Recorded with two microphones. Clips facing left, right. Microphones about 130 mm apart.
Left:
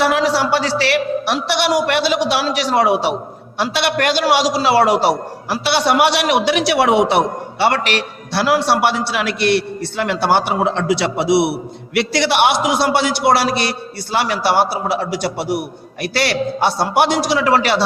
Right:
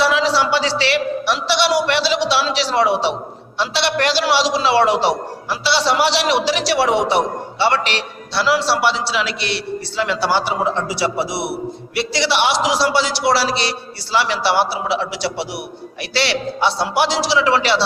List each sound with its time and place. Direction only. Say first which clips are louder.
0.0 s a man's voice: left 1 dB; 55° left (ahead or behind)